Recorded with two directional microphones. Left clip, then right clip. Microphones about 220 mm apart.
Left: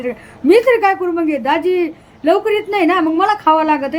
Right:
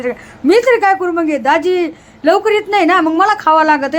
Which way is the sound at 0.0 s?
Centre (ahead or behind).